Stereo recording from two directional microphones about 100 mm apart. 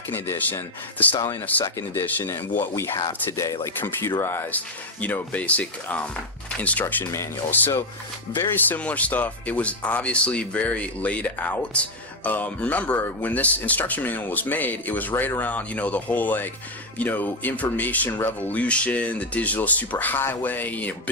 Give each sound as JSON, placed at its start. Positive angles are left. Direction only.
{"t": 0.1, "sound": "speech", "side_deg": 20}
{"t": 8.5, "sound": "speech", "side_deg": 15}